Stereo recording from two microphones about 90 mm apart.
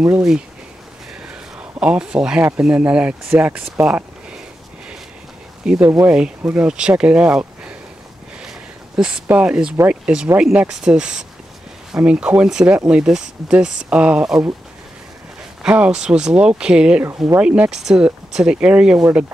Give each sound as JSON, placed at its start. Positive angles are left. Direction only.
{"t": 1.6, "sound": "speech", "side_deg": -10}
{"t": 3.8, "sound": "a sound", "side_deg": -10}
{"t": 5.8, "sound": "speech", "side_deg": -35}
{"t": 6.1, "sound": "speech", "side_deg": -10}
{"t": 8.9, "sound": "speech", "side_deg": -10}
{"t": 15.7, "sound": "speech", "side_deg": -15}